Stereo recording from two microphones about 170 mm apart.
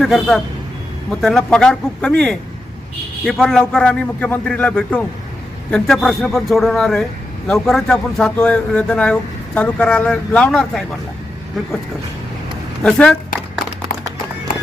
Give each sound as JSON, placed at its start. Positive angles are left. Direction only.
{"t": 0.0, "sound": "a man's voice", "side_deg": 0}
{"t": 12.8, "sound": "a man's voice", "side_deg": 5}
{"t": 13.9, "sound": "music", "side_deg": 60}